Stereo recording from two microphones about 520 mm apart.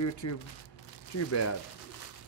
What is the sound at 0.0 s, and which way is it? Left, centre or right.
Speech, left.